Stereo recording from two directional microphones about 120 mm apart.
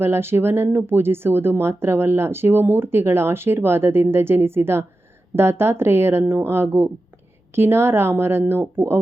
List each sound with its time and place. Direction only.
0.0 s speech: 20° right (ahead or behind)